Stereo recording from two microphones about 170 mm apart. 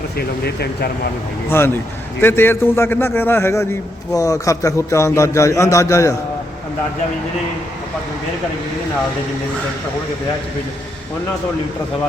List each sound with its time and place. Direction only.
0.2 s speech: 70° left (ahead or behind)
1.5 s a man's voice: 15° left (ahead or behind)